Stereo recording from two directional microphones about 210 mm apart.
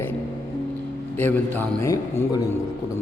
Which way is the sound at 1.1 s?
10° left (ahead or behind).